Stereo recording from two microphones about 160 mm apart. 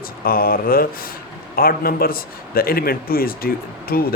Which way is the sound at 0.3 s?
65° left (ahead or behind).